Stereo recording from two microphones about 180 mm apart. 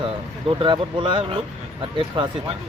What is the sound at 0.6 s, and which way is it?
Speech, 25° right (ahead or behind).